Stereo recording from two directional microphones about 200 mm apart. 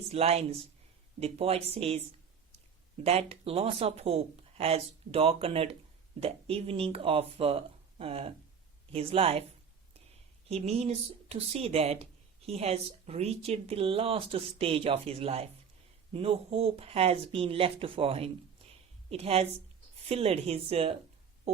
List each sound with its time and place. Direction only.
0.1 s speech: 30° right (ahead or behind)
3.0 s speech: 30° right (ahead or behind)
10.5 s speech: 30° right (ahead or behind)
18.7 s a sound: 30° right (ahead or behind)
20.1 s speech: 30° right (ahead or behind)